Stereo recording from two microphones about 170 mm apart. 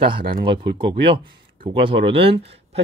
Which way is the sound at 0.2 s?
60° right (ahead or behind).